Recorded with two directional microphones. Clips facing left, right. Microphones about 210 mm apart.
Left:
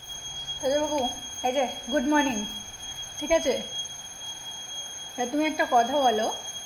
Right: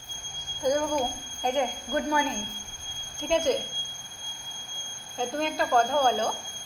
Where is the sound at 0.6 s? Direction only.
10° left (ahead or behind).